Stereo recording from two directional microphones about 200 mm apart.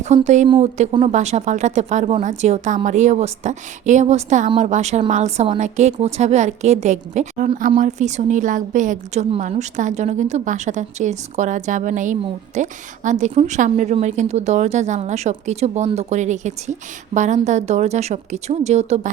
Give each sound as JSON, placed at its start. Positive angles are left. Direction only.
{"t": 0.0, "sound": "a woman's voice", "side_deg": -35}